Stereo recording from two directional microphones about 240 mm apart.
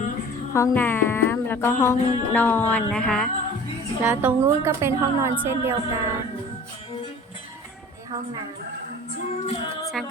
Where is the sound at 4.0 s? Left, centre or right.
Centre.